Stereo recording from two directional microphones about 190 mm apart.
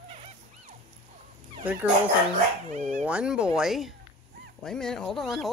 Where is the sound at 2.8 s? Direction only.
5° right (ahead or behind).